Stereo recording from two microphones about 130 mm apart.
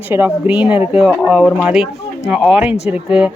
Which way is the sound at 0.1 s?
15° right (ahead or behind).